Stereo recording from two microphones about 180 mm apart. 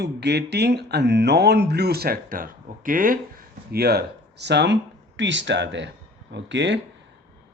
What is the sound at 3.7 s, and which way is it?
Speech, 60° right (ahead or behind).